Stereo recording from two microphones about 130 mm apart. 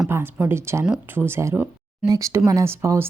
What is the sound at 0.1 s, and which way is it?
Speech, 15° right (ahead or behind).